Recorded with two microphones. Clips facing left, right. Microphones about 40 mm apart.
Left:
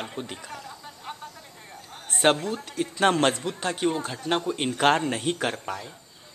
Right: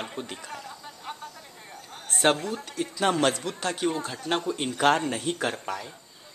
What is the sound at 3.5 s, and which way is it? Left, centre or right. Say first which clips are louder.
Speech: left 2 dB; centre.